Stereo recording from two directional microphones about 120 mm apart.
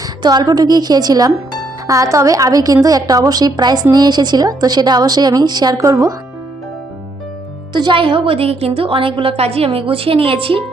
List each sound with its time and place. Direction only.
0.2 s a woman's voice: 35° right (ahead or behind)
7.7 s a woman's voice: 40° right (ahead or behind)